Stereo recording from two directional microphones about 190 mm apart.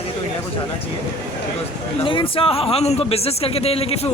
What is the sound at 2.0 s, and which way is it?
Speech, 25° left (ahead or behind).